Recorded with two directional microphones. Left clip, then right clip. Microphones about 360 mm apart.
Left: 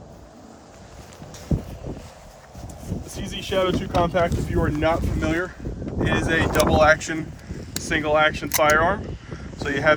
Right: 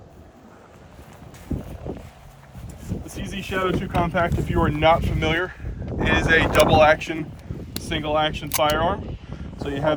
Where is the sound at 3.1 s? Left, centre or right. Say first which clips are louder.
Left 3 dB; centre.